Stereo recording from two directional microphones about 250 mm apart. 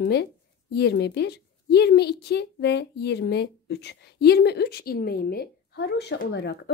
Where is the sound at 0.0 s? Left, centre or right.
Left.